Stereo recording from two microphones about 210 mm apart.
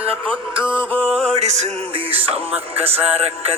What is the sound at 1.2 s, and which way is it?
Music, 30° right (ahead or behind).